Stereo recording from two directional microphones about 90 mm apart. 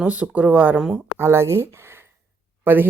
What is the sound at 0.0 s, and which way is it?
Speech, 15° right (ahead or behind).